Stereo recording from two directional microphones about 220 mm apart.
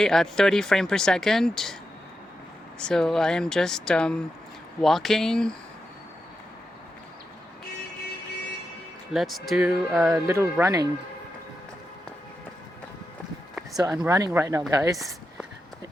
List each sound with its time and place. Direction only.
0.0 s speech: centre (ahead or behind)
2.8 s speech: 5° left (ahead or behind)
9.1 s speech: centre (ahead or behind)
10.2 s speech: 15° right (ahead or behind)
13.7 s speech: 15° right (ahead or behind)